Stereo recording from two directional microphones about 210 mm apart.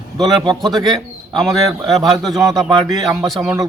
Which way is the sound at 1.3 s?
Centre (ahead or behind).